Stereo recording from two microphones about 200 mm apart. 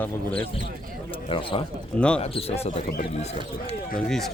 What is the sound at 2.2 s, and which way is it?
Speech, 30° left (ahead or behind).